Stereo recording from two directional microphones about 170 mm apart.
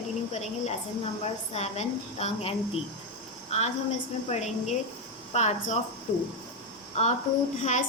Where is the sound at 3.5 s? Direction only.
40° left (ahead or behind).